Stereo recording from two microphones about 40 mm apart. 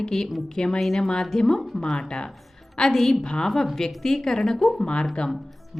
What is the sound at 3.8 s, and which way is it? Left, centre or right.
A woman's voice, centre.